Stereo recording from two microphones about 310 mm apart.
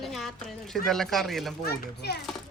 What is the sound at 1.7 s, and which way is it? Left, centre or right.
Speech, left.